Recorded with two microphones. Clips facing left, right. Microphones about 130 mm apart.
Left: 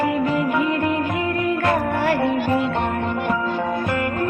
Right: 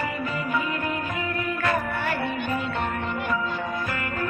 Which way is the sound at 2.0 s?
90° left.